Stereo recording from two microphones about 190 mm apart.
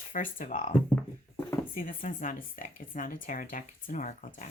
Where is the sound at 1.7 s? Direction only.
45° left (ahead or behind).